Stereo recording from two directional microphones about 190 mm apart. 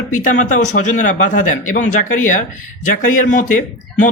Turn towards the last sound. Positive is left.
turn(degrees=40)  # may be behind; listen again after turning